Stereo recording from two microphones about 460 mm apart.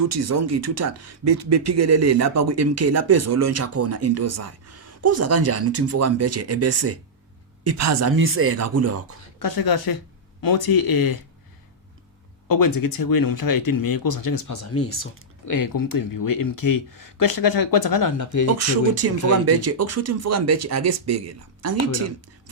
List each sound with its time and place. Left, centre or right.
0.0 s speech: right
9.4 s speech: left
12.5 s speech: left
15.4 s speech: left
18.4 s speech: right